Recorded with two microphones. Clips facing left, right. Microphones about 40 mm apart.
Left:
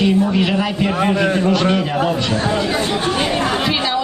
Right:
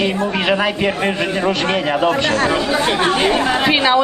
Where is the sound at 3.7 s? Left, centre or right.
Right.